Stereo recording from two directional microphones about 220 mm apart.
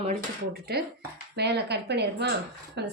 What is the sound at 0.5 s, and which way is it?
A woman's voice, 45° right (ahead or behind).